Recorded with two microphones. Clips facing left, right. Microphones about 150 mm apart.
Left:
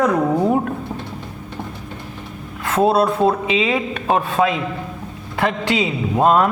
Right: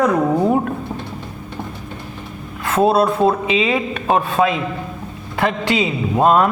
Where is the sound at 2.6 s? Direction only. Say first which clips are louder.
Right 1 dB; 15° right (ahead or behind).